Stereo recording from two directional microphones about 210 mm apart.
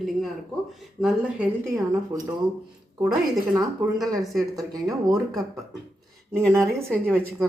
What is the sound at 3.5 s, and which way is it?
Speech, 15° right (ahead or behind).